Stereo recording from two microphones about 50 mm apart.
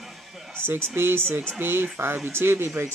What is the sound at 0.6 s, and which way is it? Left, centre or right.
Speech, right.